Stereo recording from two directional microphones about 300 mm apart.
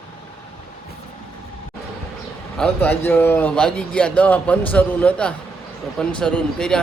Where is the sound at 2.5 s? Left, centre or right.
Centre.